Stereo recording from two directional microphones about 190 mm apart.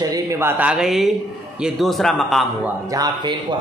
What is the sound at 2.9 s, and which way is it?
Speech, 20° right (ahead or behind).